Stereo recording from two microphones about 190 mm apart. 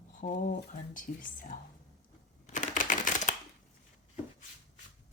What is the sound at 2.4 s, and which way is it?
Typewriter, 40° left (ahead or behind).